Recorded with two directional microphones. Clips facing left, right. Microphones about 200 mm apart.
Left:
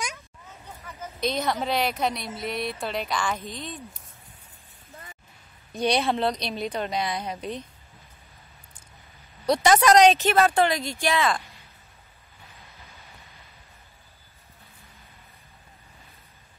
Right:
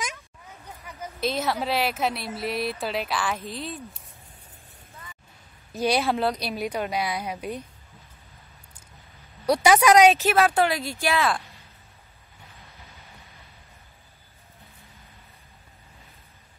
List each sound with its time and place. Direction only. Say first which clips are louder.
0.8 s a woman's voice: even; 10° right (ahead or behind)
5.7 s a woman's voice: even; 5° right (ahead or behind)
9.5 s a woman's voice: right 1 dB; 10° right (ahead or behind)